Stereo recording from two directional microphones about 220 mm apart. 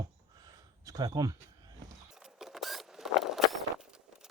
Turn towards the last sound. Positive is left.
turn(degrees=0)  # may be behind; listen again after turning